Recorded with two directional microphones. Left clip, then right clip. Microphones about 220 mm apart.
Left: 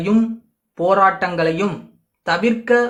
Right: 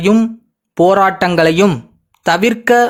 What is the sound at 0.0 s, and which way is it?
Speech, 40° right (ahead or behind).